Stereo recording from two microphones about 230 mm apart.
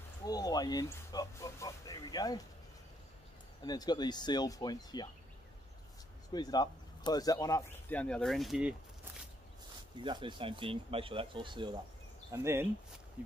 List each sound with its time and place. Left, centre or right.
0.2 s speech: centre
3.6 s speech: centre
6.3 s speech: centre
10.0 s speech: right